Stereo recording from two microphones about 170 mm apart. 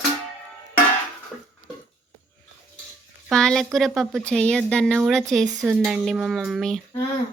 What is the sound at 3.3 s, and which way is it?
Speech, 5° left (ahead or behind).